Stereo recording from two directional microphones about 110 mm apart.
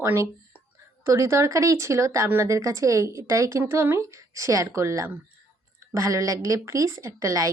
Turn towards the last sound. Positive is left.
turn(degrees=-30)  # may be behind; listen again after turning